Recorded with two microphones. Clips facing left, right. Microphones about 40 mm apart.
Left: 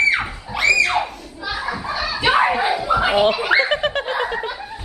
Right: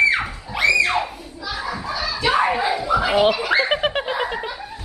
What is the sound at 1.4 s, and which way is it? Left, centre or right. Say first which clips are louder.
Children playing: left 2 dB; centre.